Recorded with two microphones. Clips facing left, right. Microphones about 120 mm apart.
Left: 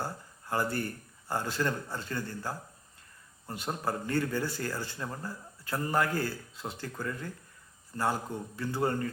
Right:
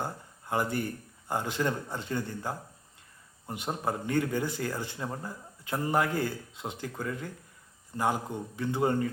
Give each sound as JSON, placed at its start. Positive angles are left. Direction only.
{"t": 0.0, "sound": "a man's voice", "side_deg": -20}